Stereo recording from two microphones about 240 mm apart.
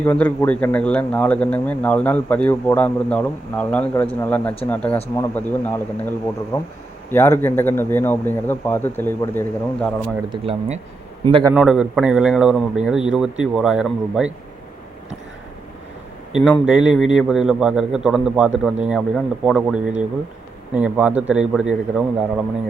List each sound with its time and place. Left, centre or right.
0.0 s speech: centre
10.2 s speech: right
11.5 s a man's voice: centre
16.3 s a man's voice: centre